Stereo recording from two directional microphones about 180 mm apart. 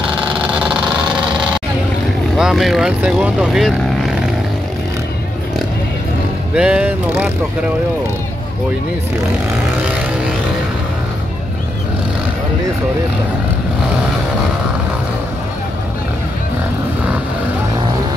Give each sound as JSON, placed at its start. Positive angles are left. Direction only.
{"t": 0.3, "sound": "vehicle", "side_deg": -5}
{"t": 2.3, "sound": "speech", "side_deg": -5}
{"t": 6.5, "sound": "speech", "side_deg": -5}